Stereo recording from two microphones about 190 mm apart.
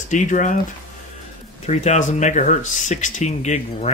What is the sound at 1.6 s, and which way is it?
Speech, 35° left (ahead or behind).